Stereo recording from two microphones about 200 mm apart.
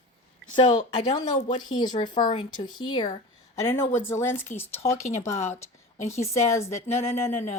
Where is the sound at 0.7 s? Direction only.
35° left (ahead or behind).